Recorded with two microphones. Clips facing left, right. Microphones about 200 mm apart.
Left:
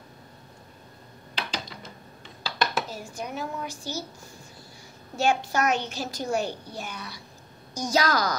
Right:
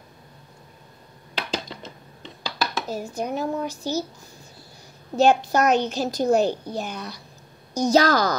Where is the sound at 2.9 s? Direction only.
40° right (ahead or behind).